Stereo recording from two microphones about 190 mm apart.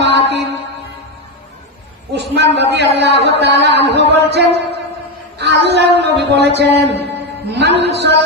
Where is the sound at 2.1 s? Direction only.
60° right (ahead or behind).